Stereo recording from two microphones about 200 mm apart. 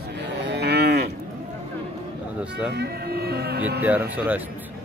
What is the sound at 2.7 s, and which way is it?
Speech, 55° right (ahead or behind).